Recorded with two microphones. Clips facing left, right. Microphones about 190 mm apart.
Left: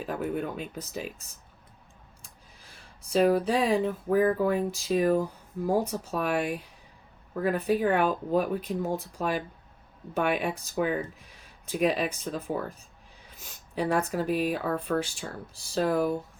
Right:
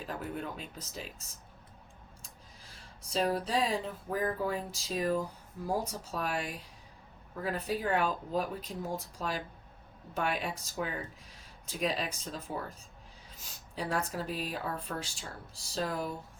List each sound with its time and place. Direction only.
0.0 s speech: 60° left (ahead or behind)
3.1 s speech: 60° left (ahead or behind)
13.7 s speech: 60° left (ahead or behind)